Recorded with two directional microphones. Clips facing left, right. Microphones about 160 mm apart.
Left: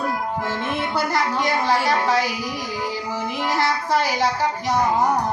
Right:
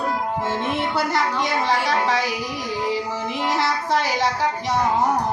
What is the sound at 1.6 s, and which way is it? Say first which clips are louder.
Speech: left 1 dB; centre (ahead or behind).